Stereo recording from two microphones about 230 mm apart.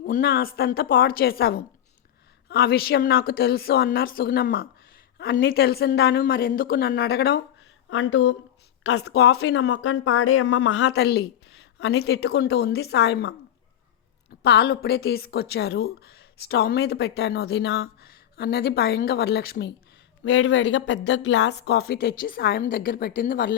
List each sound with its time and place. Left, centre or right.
0.0 s a woman's voice: left
7.9 s a woman's voice: left
9.5 s a woman's voice: left
20.2 s a woman's voice: left